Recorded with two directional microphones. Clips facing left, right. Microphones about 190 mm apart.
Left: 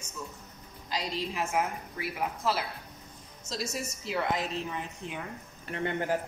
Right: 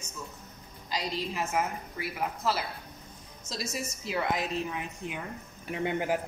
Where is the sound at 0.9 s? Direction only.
5° right (ahead or behind).